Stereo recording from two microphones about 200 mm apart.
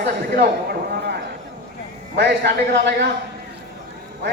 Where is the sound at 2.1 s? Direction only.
55° right (ahead or behind).